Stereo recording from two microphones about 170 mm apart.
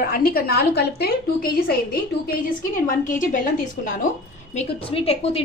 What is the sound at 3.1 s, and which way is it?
A woman's voice, 50° left (ahead or behind).